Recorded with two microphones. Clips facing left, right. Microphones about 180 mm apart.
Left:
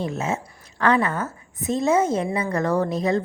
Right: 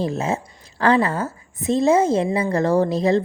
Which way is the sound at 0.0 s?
35° right (ahead or behind).